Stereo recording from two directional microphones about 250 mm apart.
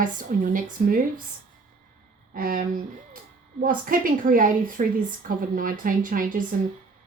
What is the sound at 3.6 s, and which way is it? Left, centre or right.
Speech, right.